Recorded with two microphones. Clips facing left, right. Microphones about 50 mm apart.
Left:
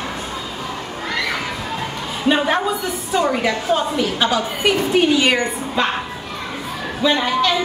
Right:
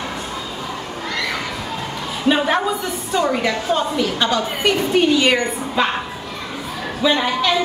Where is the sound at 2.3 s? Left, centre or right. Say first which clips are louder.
Even; centre.